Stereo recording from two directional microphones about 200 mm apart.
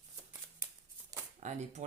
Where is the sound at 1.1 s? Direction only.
15° right (ahead or behind).